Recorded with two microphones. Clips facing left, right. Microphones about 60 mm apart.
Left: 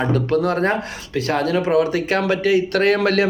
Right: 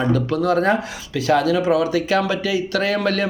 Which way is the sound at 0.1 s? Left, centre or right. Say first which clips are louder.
Even; left.